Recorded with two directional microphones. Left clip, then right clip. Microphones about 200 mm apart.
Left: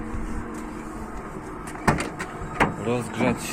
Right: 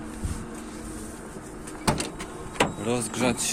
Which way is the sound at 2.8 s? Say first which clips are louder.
Left 1 dB; 25° right (ahead or behind).